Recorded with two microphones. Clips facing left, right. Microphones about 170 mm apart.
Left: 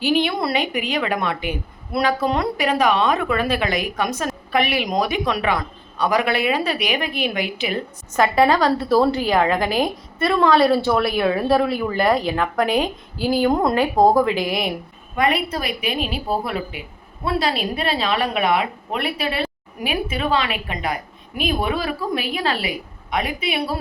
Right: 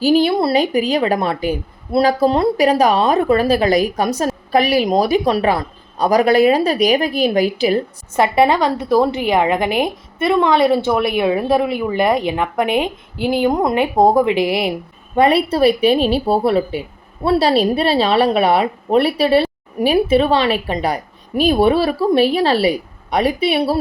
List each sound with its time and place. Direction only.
0.0 s a woman's voice: 35° right (ahead or behind)